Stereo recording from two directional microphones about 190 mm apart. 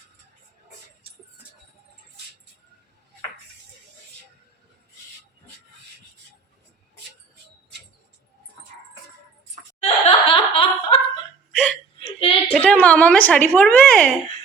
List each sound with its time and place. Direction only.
9.8 s laughter: 30° left (ahead or behind)
11.9 s a sound: 30° left (ahead or behind)
12.5 s a woman's voice: 5° left (ahead or behind)